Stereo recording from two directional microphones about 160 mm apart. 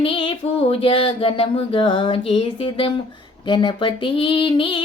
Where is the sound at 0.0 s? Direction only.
30° left (ahead or behind).